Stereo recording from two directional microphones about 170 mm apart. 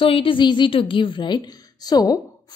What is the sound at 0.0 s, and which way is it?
A woman's voice, 30° left (ahead or behind).